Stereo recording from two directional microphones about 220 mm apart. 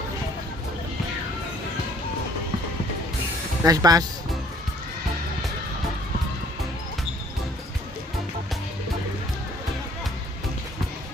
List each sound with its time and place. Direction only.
3.6 s speech: 15° right (ahead or behind)